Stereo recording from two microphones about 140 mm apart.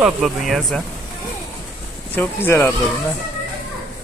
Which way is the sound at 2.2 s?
15° left (ahead or behind).